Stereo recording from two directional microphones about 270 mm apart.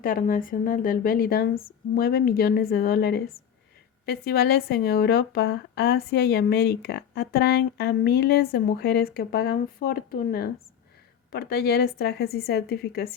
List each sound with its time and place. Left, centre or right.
0.0 s speech: left